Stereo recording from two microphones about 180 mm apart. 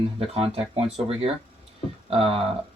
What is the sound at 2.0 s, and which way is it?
Speech, 30° right (ahead or behind).